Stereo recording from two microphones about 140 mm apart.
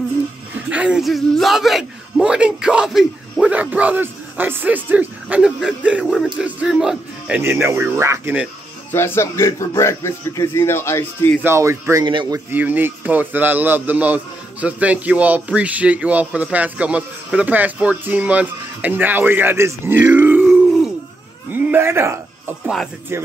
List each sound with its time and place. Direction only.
0.6 s a man's voice: 10° right (ahead or behind)
8.9 s speech: 15° left (ahead or behind)
11.4 s speech: 20° right (ahead or behind)
12.0 s speech: 35° right (ahead or behind)
12.4 s a man's voice: 10° right (ahead or behind)
21.5 s a man's voice: 15° right (ahead or behind)